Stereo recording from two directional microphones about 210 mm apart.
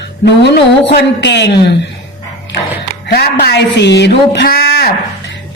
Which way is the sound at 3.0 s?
50° left (ahead or behind).